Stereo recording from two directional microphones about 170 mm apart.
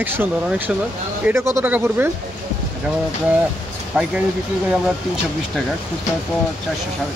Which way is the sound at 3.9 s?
5° right (ahead or behind).